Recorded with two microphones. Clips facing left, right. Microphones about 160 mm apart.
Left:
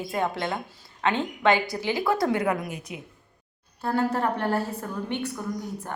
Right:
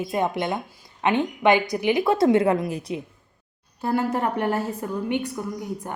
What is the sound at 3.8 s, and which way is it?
A woman's voice, 15° right (ahead or behind).